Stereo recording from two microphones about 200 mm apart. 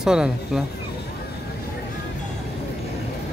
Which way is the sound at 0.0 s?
5° right (ahead or behind).